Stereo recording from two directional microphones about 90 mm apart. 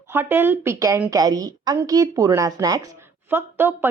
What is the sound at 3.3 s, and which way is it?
Speech, 25° right (ahead or behind).